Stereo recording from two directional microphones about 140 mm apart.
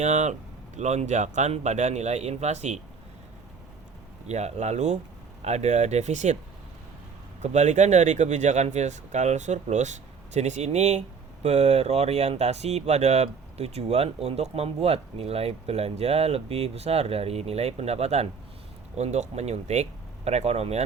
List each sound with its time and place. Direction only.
0.0 s speech: 55° right (ahead or behind)
4.3 s speech: 50° right (ahead or behind)
7.4 s speech: 55° right (ahead or behind)